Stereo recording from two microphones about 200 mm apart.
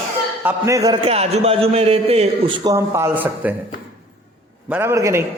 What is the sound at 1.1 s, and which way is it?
A man's voice, 30° right (ahead or behind).